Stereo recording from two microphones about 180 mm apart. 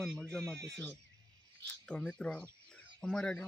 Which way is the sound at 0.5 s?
70° right (ahead or behind).